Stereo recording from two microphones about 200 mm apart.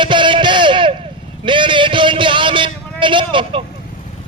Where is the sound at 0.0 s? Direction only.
25° right (ahead or behind).